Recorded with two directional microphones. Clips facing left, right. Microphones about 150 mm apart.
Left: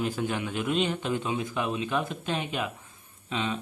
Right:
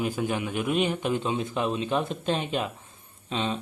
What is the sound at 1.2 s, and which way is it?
Speech, 30° right (ahead or behind).